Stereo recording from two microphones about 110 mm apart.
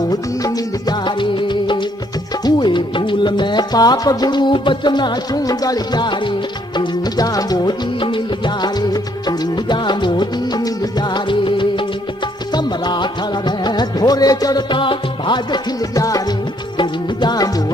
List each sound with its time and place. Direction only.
0.1 s music: 35° left (ahead or behind)
8.0 s music: 45° left (ahead or behind)
15.9 s music: 30° left (ahead or behind)